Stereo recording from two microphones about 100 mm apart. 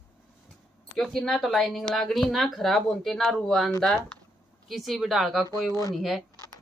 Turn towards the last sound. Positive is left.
turn(degrees=0)  # may be behind; listen again after turning